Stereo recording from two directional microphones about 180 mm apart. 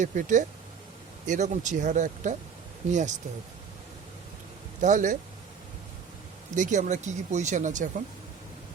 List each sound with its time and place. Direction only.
0.0 s speech: 45° right (ahead or behind)
4.8 s speech: 45° right (ahead or behind)
6.6 s speech: 45° right (ahead or behind)